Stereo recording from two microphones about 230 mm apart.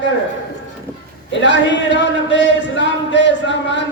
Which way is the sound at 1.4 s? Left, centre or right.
Left.